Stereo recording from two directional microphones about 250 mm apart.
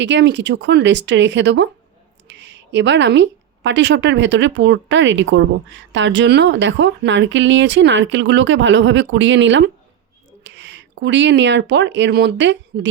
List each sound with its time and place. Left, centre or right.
0.0 s speech: right